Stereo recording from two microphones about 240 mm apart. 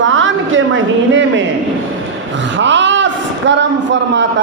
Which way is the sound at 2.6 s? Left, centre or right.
Right.